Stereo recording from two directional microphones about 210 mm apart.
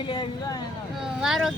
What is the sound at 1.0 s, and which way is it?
Speech, centre (ahead or behind).